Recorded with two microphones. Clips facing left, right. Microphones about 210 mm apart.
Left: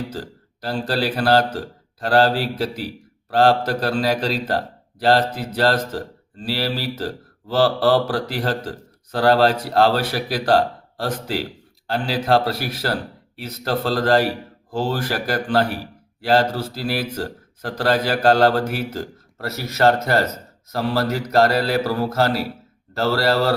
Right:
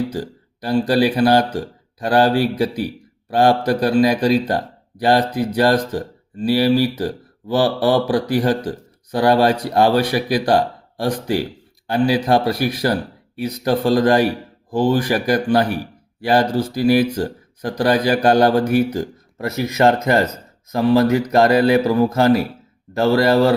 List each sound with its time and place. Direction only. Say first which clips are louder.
0.1 s a man's voice: right 5 dB; 15° right (ahead or behind)